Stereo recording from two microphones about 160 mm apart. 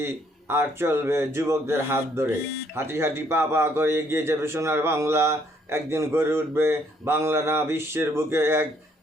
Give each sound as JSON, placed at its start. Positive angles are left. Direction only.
{"t": 0.0, "sound": "a man's voice", "side_deg": -15}